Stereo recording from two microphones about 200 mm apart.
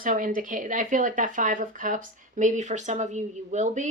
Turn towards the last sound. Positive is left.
turn(degrees=-35)  # may be behind; listen again after turning